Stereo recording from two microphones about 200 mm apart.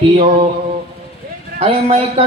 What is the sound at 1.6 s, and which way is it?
Speech, 30° right (ahead or behind).